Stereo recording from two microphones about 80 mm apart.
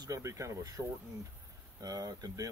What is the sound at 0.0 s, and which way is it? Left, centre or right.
Speech, right.